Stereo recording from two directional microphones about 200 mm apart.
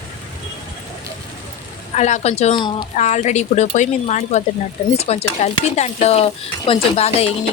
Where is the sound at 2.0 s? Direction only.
35° left (ahead or behind).